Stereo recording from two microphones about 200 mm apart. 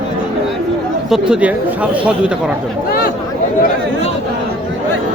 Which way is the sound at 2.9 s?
45° left (ahead or behind).